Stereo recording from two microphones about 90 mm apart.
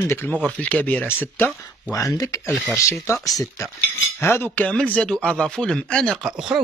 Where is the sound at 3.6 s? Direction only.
35° left (ahead or behind); by 6.1 s 10° left (ahead or behind).